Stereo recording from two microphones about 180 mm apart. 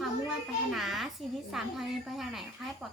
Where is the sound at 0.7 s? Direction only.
Centre (ahead or behind).